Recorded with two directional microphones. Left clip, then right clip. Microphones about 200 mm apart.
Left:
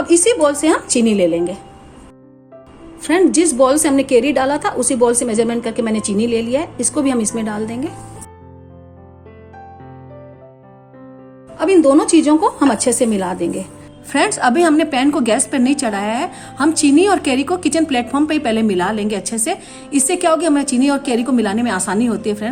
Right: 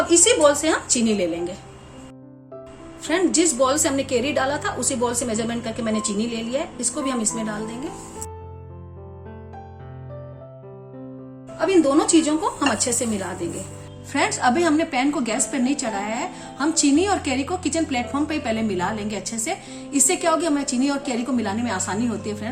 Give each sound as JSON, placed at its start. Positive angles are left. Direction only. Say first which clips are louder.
{"t": 0.1, "sound": "a woman's voice", "louder": "left 4 dB", "side_deg": 35}
{"t": 3.0, "sound": "a woman's voice", "louder": "left 7 dB", "side_deg": 40}
{"t": 11.5, "sound": "a woman's voice", "louder": "left 6 dB", "side_deg": 45}